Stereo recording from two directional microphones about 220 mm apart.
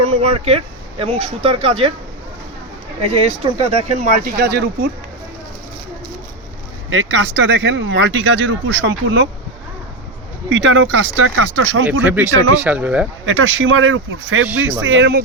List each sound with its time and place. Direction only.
0.0 s speech: 30° right (ahead or behind)
3.0 s speech: 30° right (ahead or behind); by 4.9 s 45° right (ahead or behind)
6.9 s speech: 60° right (ahead or behind)
10.5 s speech: 55° right (ahead or behind)
12.0 s speech: 5° right (ahead or behind)
13.2 s speech: 60° right (ahead or behind)
14.8 s speech: 50° right (ahead or behind)